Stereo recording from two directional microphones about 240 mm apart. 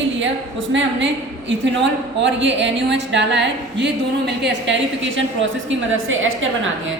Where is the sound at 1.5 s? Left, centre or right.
Right.